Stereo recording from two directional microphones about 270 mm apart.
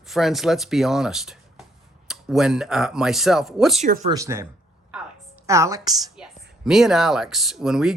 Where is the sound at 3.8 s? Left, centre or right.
Right.